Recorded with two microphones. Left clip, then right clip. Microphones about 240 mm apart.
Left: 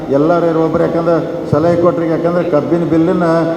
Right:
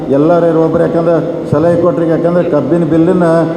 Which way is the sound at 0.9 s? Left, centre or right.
Right.